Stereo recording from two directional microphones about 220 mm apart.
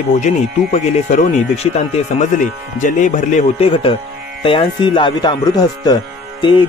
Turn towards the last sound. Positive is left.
turn(degrees=20)  # may be behind; listen again after turning